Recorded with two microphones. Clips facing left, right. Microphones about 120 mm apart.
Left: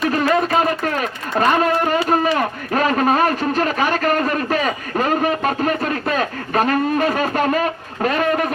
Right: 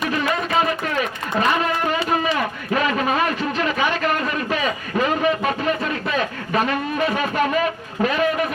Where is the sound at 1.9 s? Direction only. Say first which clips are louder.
Left 4 dB; 45° left (ahead or behind).